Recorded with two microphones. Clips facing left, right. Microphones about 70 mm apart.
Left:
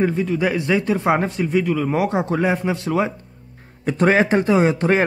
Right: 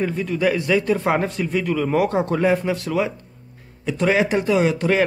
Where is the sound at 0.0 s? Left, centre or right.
Centre.